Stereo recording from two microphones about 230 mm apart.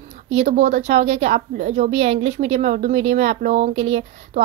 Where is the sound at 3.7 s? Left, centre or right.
Right.